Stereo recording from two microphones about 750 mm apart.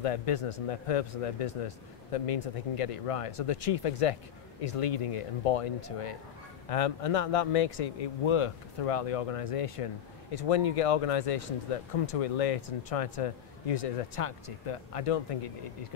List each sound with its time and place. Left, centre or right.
0.0 s speech: left